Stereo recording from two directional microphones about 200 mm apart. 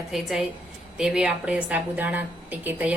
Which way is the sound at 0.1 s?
Centre (ahead or behind).